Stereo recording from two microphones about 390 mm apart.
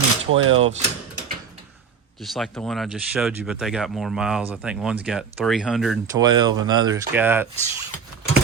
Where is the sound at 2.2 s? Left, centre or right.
Centre.